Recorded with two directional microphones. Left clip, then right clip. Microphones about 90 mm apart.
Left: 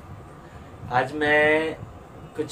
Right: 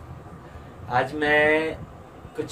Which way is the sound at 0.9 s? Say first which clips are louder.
Even; 20° right (ahead or behind).